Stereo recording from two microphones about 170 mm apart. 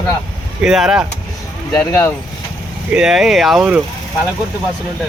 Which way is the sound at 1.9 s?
15° left (ahead or behind).